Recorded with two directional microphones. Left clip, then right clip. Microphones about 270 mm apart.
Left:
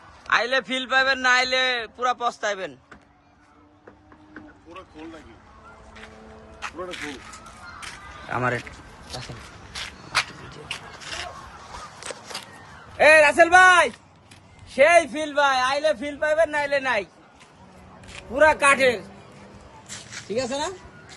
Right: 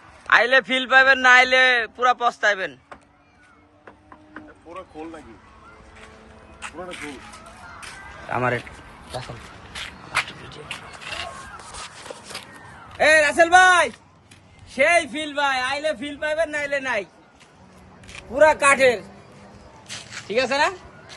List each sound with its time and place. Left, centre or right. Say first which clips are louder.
0.3 s a man's voice: right 5 dB; centre
6.6 s speech: left 1 dB; centre
8.3 s a man's voice: right 2 dB; centre
9.7 s a sound: even; centre
13.0 s a man's voice: left 1 dB; centre
19.9 s a sound: right 4 dB; centre